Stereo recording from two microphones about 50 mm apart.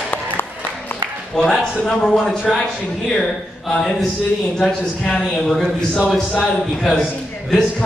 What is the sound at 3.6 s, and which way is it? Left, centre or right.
A man's voice, centre.